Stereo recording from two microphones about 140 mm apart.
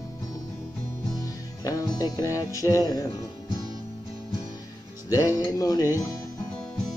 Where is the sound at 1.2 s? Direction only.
25° left (ahead or behind).